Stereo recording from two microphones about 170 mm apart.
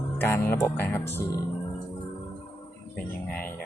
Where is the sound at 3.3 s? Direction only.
10° left (ahead or behind).